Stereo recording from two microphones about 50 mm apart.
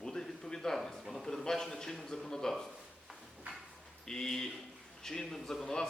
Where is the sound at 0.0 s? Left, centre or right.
Centre.